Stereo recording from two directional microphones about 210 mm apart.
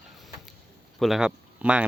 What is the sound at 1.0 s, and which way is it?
Speech, centre (ahead or behind).